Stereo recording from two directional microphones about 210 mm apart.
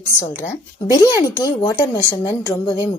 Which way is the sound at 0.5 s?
15° left (ahead or behind).